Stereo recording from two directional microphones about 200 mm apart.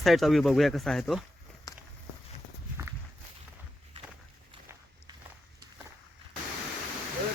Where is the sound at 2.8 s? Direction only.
15° right (ahead or behind).